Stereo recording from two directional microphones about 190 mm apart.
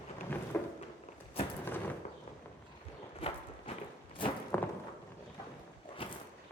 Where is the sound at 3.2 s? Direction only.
30° left (ahead or behind).